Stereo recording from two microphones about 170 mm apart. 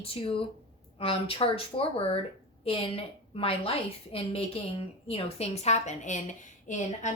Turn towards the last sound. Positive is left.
turn(degrees=45)  # may be behind; listen again after turning